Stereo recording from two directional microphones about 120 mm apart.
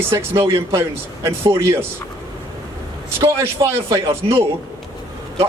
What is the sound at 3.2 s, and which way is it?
Speech, 25° right (ahead or behind).